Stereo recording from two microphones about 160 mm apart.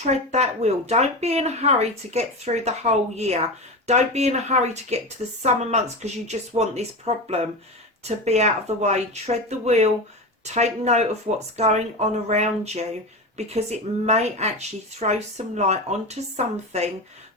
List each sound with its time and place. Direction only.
0.0 s speech: 45° right (ahead or behind)